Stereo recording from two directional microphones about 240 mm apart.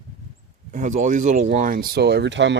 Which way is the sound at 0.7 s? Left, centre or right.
Right.